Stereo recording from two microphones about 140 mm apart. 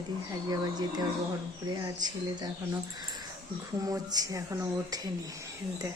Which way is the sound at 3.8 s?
25° right (ahead or behind).